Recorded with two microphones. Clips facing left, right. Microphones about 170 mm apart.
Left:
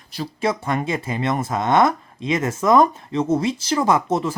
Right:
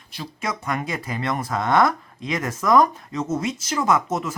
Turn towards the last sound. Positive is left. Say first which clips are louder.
# left 3 dB
turn(degrees=30)  # may be behind; listen again after turning